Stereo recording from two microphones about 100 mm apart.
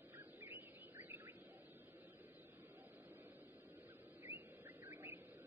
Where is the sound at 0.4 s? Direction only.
20° right (ahead or behind).